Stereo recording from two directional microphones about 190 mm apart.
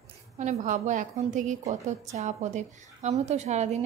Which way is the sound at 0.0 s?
35° right (ahead or behind).